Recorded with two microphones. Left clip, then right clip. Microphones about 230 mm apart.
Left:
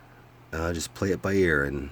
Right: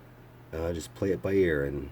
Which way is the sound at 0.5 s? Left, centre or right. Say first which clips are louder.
Left 3 dB; left.